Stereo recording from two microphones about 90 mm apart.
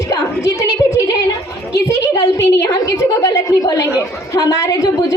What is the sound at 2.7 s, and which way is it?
A woman's voice, 40° left (ahead or behind).